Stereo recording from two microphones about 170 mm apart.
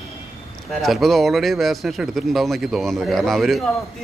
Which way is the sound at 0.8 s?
Centre (ahead or behind).